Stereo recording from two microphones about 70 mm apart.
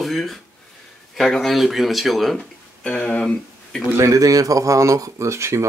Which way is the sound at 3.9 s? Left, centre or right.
Right.